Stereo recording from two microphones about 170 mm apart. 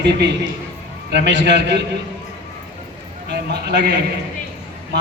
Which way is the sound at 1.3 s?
90° right.